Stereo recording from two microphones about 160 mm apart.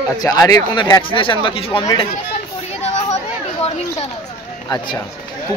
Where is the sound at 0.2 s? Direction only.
25° left (ahead or behind).